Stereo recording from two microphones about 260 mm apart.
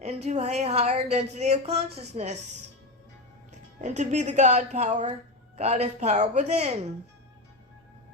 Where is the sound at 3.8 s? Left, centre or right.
Right.